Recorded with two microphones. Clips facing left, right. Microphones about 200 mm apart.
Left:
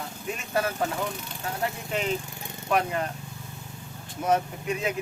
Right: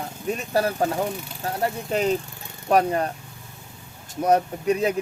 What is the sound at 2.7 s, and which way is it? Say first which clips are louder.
Speech: right 6 dB; 35° right (ahead or behind).